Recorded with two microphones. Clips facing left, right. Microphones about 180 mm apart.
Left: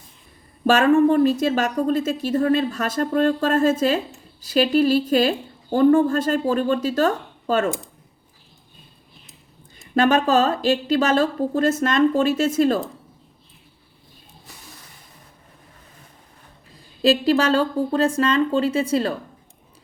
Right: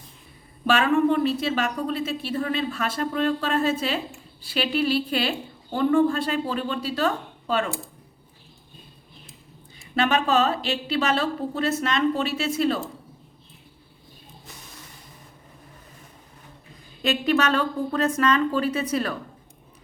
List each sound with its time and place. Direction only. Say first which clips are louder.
0.6 s a woman's voice: left 5 dB; 40° left (ahead or behind)
9.9 s a woman's voice: left 5 dB; 45° left (ahead or behind)
17.0 s speech: left 5 dB; 30° left (ahead or behind)